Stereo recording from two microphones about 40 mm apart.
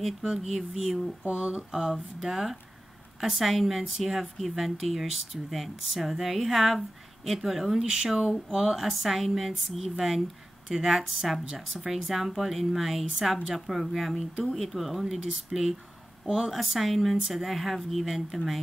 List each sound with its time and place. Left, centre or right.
0.2 s speech: centre
1.2 s speech: right
1.7 s speech: centre
7.8 s speech: centre
16.3 s speech: centre
16.5 s speech: centre